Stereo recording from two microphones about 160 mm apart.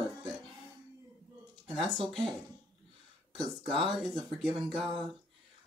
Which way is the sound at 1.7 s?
30° right (ahead or behind).